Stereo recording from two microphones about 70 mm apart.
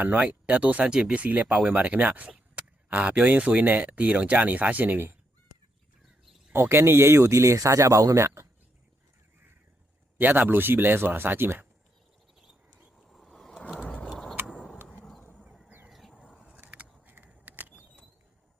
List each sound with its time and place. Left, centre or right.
0.0 s speech: right
6.5 s speech: right
10.2 s speech: right
13.0 s vehicle: centre
14.0 s a sound: centre
14.8 s vehicle: centre
15.2 s vehicle: left
15.9 s a sound: centre
16.5 s a sound: right